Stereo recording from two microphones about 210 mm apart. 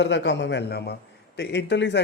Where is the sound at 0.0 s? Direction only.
60° left (ahead or behind).